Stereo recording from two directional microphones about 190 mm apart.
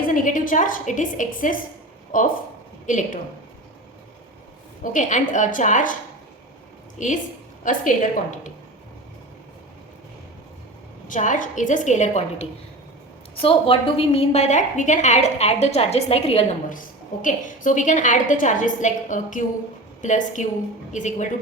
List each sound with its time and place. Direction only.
0.0 s a woman's voice: 45° left (ahead or behind)
4.8 s a woman's voice: 40° left (ahead or behind)
7.0 s a woman's voice: 40° left (ahead or behind)
11.1 s a woman's voice: 40° left (ahead or behind)
17.2 s a woman's voice: 45° left (ahead or behind)